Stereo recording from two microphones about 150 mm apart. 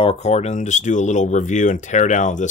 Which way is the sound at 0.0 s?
45° left (ahead or behind).